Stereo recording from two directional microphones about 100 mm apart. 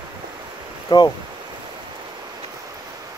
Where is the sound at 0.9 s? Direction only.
45° left (ahead or behind).